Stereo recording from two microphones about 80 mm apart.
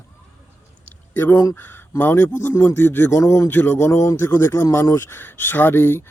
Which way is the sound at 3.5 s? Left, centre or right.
Left.